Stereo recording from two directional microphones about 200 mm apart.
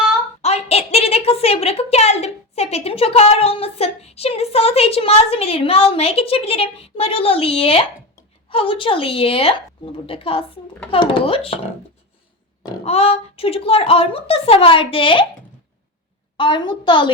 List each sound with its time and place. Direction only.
0.4 s a sound: 30° left (ahead or behind)
8.4 s speech: 25° left (ahead or behind)
12.8 s speech: 30° left (ahead or behind)
16.4 s speech: 25° left (ahead or behind)